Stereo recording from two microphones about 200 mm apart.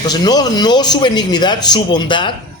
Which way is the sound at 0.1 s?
20° left (ahead or behind).